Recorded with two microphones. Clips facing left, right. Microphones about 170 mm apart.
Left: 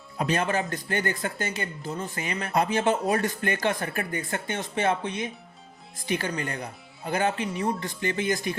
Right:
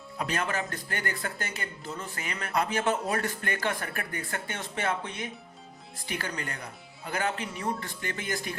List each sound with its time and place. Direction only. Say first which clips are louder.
0.2 s speech: left 5 dB; 25° left (ahead or behind)